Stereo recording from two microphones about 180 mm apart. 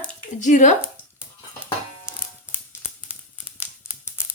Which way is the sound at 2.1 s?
15° left (ahead or behind).